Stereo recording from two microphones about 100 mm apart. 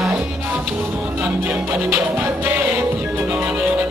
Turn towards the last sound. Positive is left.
turn(degrees=-10)  # may be behind; listen again after turning